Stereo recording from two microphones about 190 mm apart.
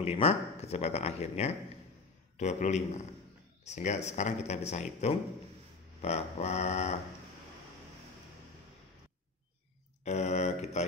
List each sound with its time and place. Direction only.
0.0 s speech: 30° left (ahead or behind)
10.0 s speech: 35° left (ahead or behind)